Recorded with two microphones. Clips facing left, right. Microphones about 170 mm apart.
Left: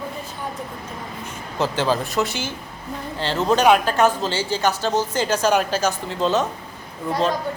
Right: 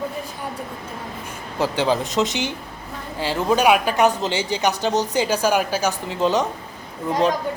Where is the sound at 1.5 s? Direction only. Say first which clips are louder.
Right 1 dB; 15° right (ahead or behind).